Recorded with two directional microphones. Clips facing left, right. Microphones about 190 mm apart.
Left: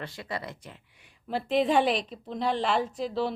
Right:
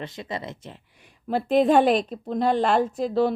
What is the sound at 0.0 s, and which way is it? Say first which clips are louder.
Speech: right 3 dB; 20° right (ahead or behind).